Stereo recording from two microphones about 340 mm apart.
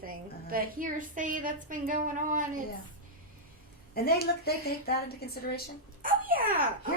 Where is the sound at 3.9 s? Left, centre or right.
Left.